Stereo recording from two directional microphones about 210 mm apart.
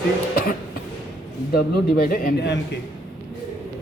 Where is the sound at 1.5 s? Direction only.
45° left (ahead or behind).